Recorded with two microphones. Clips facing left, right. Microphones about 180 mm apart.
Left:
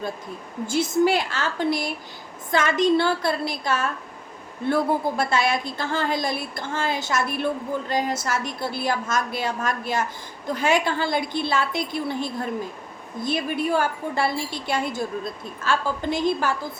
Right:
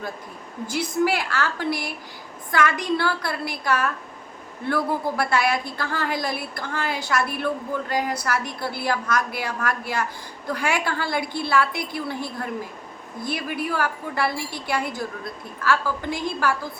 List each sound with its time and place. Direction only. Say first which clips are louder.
0.7 s a woman's voice: left 3 dB; 25° left (ahead or behind)